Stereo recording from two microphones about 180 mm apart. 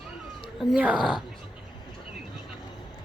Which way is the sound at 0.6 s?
5° right (ahead or behind).